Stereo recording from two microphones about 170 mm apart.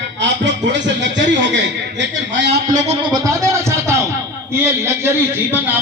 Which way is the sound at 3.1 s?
20° right (ahead or behind).